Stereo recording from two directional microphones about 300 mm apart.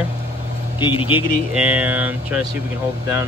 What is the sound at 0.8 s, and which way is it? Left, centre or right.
Speech, centre.